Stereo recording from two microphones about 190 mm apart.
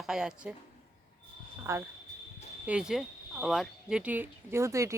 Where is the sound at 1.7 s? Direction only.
15° right (ahead or behind).